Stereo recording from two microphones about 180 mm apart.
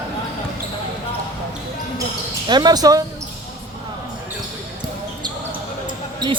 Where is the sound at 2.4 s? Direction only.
25° right (ahead or behind).